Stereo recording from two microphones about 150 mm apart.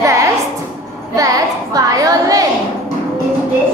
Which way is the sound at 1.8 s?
25° right (ahead or behind).